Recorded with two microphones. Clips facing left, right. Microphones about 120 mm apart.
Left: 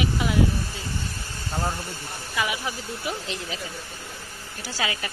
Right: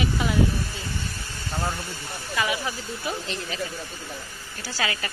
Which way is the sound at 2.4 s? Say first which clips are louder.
Right 1 dB; 10° left (ahead or behind).